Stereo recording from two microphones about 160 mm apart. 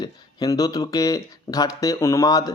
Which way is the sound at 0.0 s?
25° left (ahead or behind).